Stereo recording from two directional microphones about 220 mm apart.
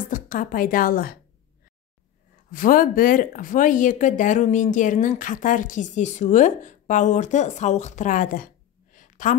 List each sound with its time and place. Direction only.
0.1 s speech: 40° left (ahead or behind)
2.5 s speech: 40° left (ahead or behind)
8.9 s a sound: 35° left (ahead or behind)